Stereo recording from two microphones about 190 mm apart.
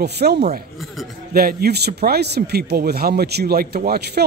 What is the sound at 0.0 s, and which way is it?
Speech, 60° right (ahead or behind).